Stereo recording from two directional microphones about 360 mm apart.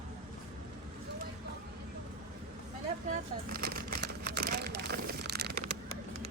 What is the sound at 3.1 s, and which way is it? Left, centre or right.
Crumpling, right.